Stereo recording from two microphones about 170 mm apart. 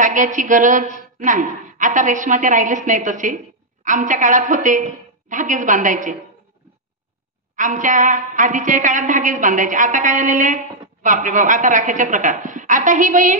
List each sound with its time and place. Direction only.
0.0 s a woman's voice: 50° right (ahead or behind)
7.5 s a woman's voice: 50° right (ahead or behind)